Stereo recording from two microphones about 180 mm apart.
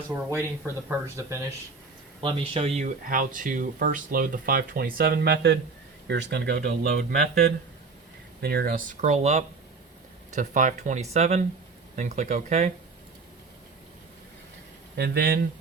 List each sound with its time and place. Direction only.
0.1 s speech: 15° right (ahead or behind)
2.2 s speech: 30° right (ahead or behind)
2.8 s speech: 50° right (ahead or behind)
14.9 s speech: 60° right (ahead or behind)